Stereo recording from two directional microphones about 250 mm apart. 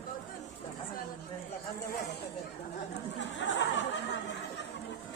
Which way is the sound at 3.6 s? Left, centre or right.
Left.